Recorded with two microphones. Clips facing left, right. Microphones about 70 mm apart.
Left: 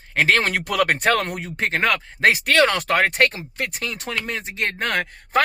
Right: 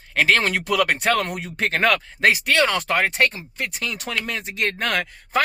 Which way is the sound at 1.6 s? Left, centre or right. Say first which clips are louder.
Even; left.